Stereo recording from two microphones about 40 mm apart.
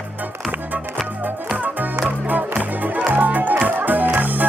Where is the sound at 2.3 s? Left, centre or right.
Right.